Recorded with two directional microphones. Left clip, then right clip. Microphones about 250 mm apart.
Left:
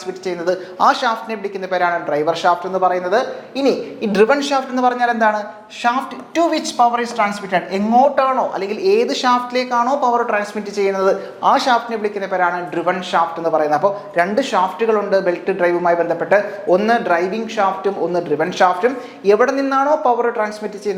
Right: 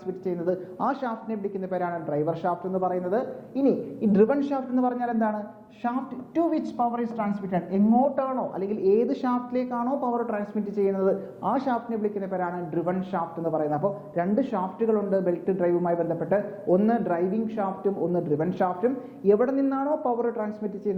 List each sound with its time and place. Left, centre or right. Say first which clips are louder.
0.3 s a woman's voice: left 8 dB; centre
2.6 s speech: left 11 dB; centre
2.9 s a woman's voice: left 10 dB; centre